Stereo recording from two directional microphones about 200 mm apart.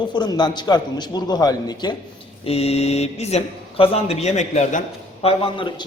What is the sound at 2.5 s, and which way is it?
A man's voice, 30° left (ahead or behind).